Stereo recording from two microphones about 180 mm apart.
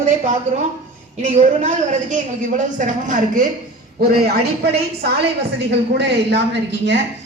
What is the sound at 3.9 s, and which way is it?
A woman's voice, 55° right (ahead or behind).